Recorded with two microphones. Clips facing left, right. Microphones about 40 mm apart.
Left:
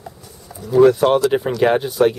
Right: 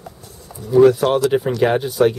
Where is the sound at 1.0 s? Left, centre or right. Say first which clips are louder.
Left 2 dB; centre.